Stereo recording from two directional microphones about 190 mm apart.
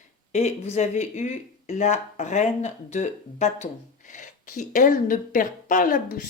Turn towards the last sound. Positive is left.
turn(degrees=50)  # may be behind; listen again after turning